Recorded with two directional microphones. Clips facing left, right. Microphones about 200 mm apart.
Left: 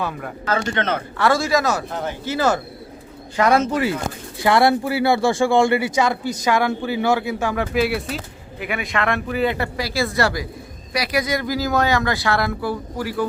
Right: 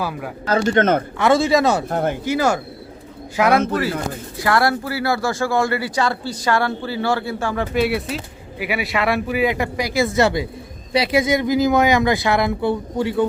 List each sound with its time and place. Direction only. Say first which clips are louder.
0.0 s a man's voice: right 1 dB; 5° right (ahead or behind)
0.4 s a man's voice: right 6 dB; 40° right (ahead or behind)
1.1 s speech: even; 20° right (ahead or behind)
1.9 s speech: right 6 dB; 55° right (ahead or behind)
2.2 s speech: left 2 dB; 10° right (ahead or behind)
3.5 s speech: even; 60° right (ahead or behind)
4.4 s speech: left 3 dB; 25° left (ahead or behind)
7.7 s speech: right 1 dB; centre (ahead or behind); by 13.2 s 25° right (ahead or behind)